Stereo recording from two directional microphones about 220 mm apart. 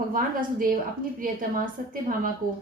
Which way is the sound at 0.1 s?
40° right (ahead or behind).